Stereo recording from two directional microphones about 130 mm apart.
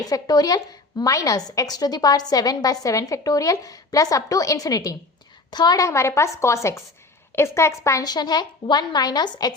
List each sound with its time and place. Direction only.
0.0 s a woman's voice: 30° left (ahead or behind)